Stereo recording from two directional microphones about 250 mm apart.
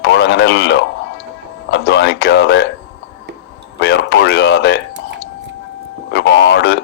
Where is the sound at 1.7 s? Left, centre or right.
Left.